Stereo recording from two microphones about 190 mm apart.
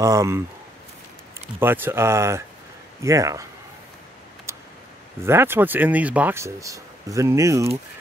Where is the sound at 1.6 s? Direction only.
10° right (ahead or behind).